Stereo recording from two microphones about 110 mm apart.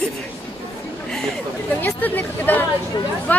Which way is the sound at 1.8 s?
15° left (ahead or behind).